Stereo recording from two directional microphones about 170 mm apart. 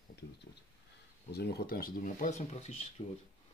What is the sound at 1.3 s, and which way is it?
Speech, 70° left (ahead or behind).